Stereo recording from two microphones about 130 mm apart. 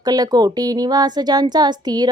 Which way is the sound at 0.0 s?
30° right (ahead or behind).